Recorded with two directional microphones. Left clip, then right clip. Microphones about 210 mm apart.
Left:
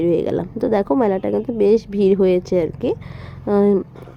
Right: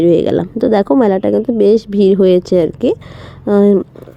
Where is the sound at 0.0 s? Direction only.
20° right (ahead or behind).